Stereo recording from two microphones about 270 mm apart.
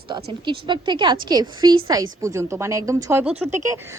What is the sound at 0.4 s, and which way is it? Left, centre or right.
A woman's voice, centre.